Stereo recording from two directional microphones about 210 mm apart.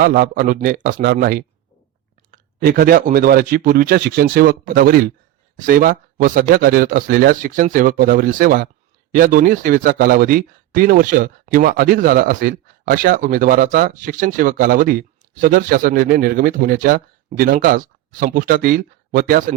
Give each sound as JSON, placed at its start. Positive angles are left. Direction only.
{"t": 0.0, "sound": "speech", "side_deg": -45}